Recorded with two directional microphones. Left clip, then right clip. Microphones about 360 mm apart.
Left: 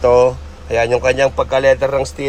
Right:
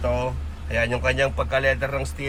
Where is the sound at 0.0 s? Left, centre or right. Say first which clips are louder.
Left 14 dB; centre.